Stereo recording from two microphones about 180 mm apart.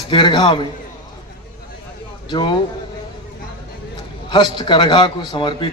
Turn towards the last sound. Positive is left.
turn(degrees=25)  # may be behind; listen again after turning